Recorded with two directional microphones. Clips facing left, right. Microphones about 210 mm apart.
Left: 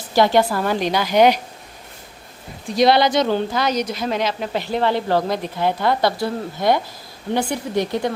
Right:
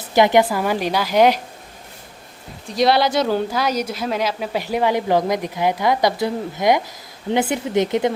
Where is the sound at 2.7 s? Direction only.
Centre (ahead or behind).